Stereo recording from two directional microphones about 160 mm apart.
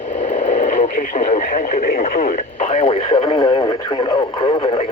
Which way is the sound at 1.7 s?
60° left (ahead or behind).